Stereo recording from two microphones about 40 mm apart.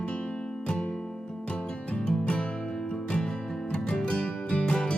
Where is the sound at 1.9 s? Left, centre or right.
Left.